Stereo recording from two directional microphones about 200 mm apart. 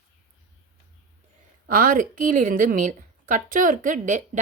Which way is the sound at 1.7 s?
45° right (ahead or behind).